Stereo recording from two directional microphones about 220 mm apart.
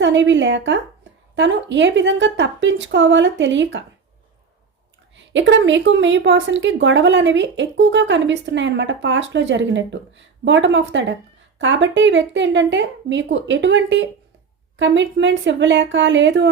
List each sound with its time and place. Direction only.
0.0 s speech: 55° right (ahead or behind)
5.1 s speech: 55° right (ahead or behind)